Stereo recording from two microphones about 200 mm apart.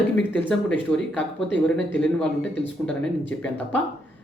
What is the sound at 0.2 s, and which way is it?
Speech, 10° left (ahead or behind).